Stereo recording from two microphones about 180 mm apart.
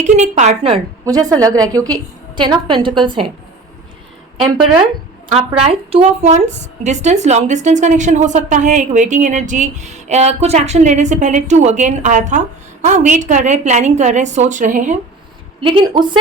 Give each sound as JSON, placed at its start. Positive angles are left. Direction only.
{"t": 0.0, "sound": "a woman's voice", "side_deg": -40}
{"t": 1.0, "sound": "a woman's voice", "side_deg": -20}
{"t": 5.5, "sound": "a woman's voice", "side_deg": -35}
{"t": 15.6, "sound": "a woman's voice", "side_deg": -25}